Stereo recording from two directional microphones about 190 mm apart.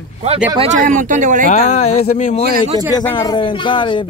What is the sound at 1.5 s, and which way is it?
Speech, 40° left (ahead or behind).